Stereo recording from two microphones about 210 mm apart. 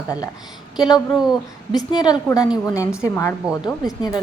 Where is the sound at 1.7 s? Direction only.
20° left (ahead or behind).